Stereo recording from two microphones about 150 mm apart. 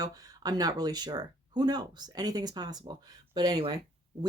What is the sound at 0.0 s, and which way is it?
Speech, 25° right (ahead or behind).